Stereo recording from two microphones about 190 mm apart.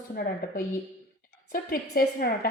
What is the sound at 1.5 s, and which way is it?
Speech, 50° left (ahead or behind).